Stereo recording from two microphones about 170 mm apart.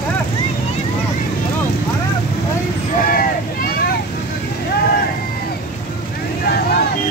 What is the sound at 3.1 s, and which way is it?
Vehicle, 60° left (ahead or behind).